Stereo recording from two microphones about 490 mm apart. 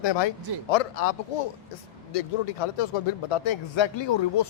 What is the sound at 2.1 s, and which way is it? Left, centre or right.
A man's voice, left.